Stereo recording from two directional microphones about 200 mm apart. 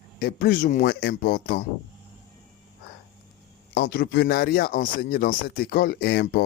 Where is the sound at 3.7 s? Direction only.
55° left (ahead or behind).